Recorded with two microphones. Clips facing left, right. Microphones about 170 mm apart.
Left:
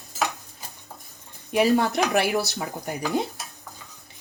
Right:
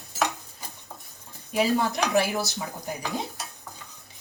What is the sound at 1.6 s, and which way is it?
Speech, 60° left (ahead or behind).